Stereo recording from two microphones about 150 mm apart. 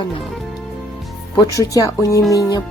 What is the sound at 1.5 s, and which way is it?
Speech, 20° left (ahead or behind).